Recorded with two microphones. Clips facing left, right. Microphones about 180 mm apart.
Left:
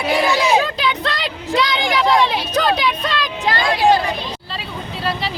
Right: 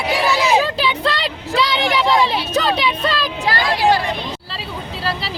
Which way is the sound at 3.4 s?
20° left (ahead or behind).